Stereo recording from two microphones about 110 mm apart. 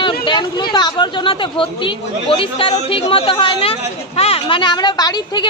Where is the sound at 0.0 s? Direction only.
45° left (ahead or behind).